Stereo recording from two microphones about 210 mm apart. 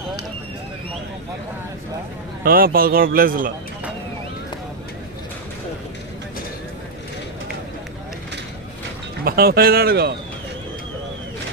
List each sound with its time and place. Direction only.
2.4 s a man's voice: 45° right (ahead or behind)
9.2 s a man's voice: 45° right (ahead or behind)